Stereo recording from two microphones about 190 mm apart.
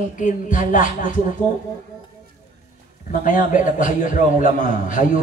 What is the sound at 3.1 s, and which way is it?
A man's voice, 45° left (ahead or behind).